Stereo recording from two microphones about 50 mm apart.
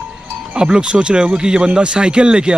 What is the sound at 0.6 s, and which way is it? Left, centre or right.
Speech, centre.